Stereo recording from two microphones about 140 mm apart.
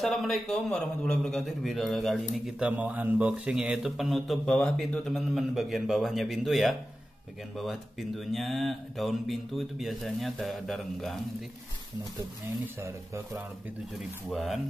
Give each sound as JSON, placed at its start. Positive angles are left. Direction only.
{"t": 0.0, "sound": "speech", "side_deg": 0}
{"t": 12.8, "sound": "speech", "side_deg": -20}
{"t": 14.3, "sound": "speech", "side_deg": 0}